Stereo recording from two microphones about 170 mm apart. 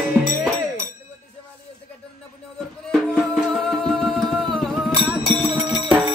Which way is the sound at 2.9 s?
5° left (ahead or behind).